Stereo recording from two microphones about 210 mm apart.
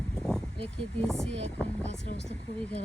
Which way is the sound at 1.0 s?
Centre (ahead or behind).